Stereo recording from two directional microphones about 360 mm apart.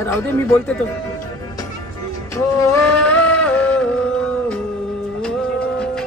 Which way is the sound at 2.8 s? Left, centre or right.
Centre.